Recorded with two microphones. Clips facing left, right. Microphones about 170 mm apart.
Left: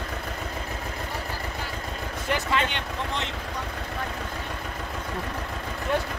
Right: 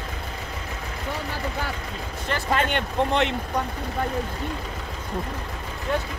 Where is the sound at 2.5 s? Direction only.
50° right (ahead or behind).